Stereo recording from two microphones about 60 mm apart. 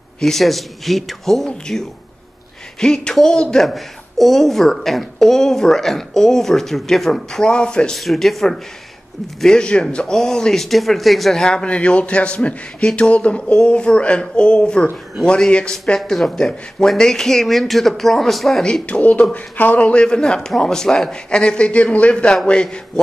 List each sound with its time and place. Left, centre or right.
0.2 s speech: centre
8.0 s speech: centre
16.0 s speech: centre
18.6 s speech: centre
18.9 s speech: left